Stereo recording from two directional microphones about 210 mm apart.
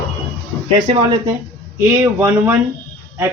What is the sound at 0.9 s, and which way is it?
Speech, 25° right (ahead or behind).